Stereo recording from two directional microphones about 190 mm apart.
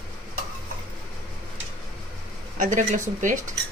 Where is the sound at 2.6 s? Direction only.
40° right (ahead or behind).